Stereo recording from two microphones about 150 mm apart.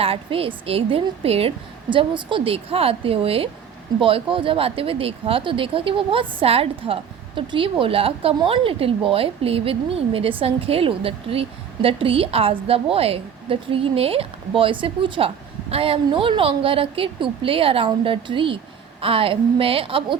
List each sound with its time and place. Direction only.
0.0 s speech: 40° right (ahead or behind)